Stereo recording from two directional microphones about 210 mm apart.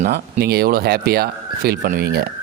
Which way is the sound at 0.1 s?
50° right (ahead or behind).